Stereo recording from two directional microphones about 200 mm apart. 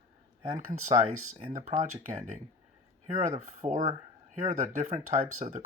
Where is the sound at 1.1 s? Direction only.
90° right.